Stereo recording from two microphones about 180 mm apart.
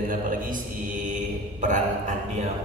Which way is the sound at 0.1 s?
50° right (ahead or behind).